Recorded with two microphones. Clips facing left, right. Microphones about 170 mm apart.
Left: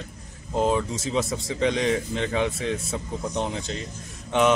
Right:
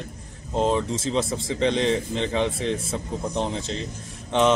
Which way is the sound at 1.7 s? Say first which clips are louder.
Right 2 dB; 30° right (ahead or behind).